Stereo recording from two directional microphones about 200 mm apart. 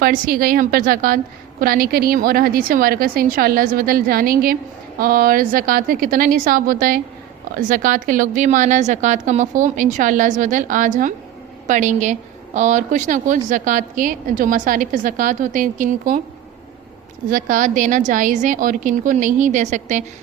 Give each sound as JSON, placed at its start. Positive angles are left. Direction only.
{"t": 0.0, "sound": "a woman's voice", "side_deg": -45}
{"t": 17.2, "sound": "a woman's voice", "side_deg": -40}